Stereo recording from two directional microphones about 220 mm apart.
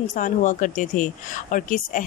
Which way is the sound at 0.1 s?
35° left (ahead or behind).